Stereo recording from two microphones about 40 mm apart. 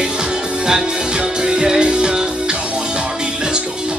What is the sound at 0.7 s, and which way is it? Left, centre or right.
Music, centre.